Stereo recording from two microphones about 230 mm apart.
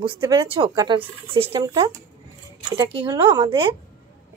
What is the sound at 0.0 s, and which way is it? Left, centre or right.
Speech, centre.